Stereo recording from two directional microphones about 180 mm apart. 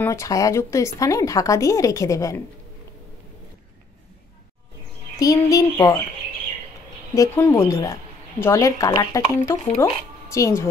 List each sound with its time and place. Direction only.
0.0 s a woman's voice: 15° left (ahead or behind)
5.2 s speech: 20° left (ahead or behind)
7.2 s a woman's voice: 10° left (ahead or behind)